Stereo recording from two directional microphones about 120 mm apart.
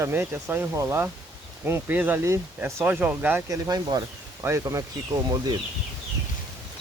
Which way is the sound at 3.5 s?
30° right (ahead or behind).